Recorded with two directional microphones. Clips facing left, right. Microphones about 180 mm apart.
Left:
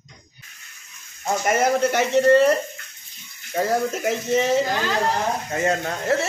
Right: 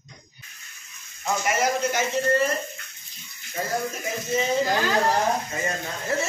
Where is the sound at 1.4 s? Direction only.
55° left (ahead or behind); by 2.5 s 70° left (ahead or behind).